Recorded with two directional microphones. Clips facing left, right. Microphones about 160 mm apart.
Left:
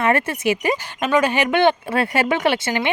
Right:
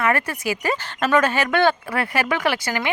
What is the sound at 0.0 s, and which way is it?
Speech, 25° left (ahead or behind).